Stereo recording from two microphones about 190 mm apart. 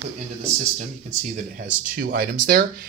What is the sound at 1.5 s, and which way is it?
Speech, 45° right (ahead or behind).